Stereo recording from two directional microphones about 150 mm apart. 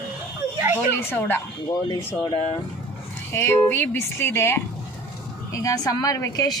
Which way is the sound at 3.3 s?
15° left (ahead or behind).